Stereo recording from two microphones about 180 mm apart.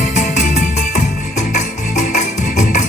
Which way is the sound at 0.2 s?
45° left (ahead or behind).